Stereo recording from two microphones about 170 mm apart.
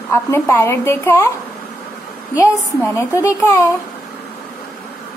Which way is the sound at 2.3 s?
15° left (ahead or behind).